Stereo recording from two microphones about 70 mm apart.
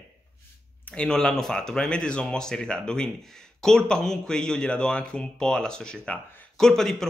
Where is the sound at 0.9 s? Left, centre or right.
Centre.